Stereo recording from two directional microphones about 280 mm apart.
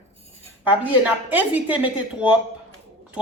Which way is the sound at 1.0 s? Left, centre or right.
Centre.